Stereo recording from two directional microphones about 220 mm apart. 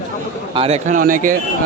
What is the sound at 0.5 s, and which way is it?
Speech, 25° right (ahead or behind).